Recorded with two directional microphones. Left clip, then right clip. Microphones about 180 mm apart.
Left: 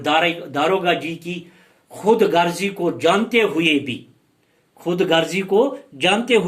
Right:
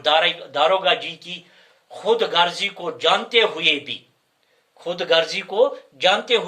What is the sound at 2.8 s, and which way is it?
Speech, 25° right (ahead or behind).